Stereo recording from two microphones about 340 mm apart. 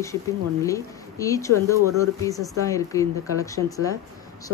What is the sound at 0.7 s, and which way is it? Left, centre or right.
Speech, centre.